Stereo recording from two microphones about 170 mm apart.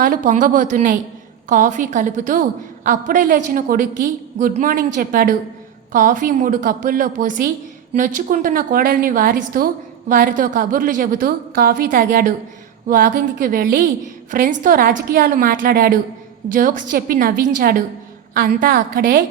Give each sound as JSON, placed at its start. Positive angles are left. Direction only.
{"t": 0.0, "sound": "a woman's voice", "side_deg": -50}